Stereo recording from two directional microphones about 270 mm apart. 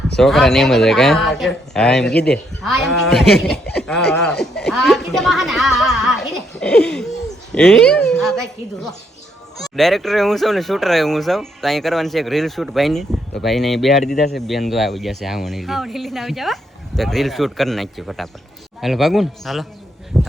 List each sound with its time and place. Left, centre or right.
0.2 s speech: centre
20.1 s speech: centre